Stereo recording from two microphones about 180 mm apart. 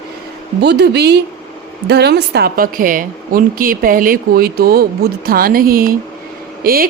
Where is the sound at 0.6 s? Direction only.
65° right (ahead or behind).